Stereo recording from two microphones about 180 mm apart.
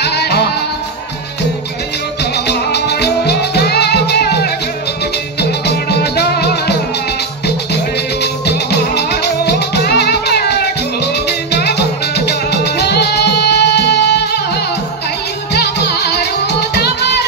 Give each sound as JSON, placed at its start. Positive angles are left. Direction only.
{"t": 0.0, "sound": "music", "side_deg": 65}
{"t": 2.3, "sound": "music", "side_deg": 65}
{"t": 8.2, "sound": "music", "side_deg": 65}
{"t": 15.5, "sound": "music", "side_deg": 65}